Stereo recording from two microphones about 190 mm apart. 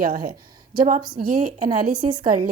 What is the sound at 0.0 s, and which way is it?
A woman's voice, 45° right (ahead or behind).